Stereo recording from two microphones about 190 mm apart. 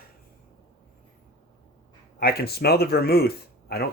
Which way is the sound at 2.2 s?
55° left (ahead or behind).